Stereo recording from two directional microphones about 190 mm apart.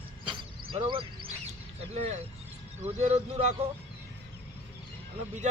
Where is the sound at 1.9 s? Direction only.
35° right (ahead or behind).